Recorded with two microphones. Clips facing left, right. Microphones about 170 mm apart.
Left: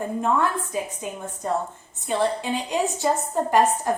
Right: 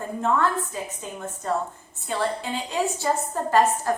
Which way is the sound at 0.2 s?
15° left (ahead or behind).